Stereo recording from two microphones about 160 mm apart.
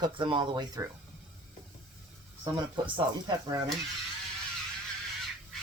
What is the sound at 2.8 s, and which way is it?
Speech, 25° right (ahead or behind).